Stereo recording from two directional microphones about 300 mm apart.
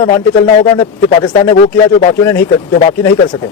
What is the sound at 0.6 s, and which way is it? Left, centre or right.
A man's voice, centre.